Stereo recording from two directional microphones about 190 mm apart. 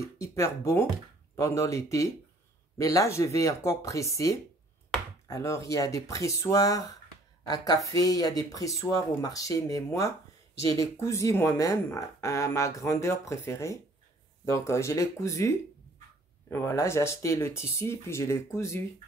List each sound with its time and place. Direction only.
0.0 s speech: 15° left (ahead or behind)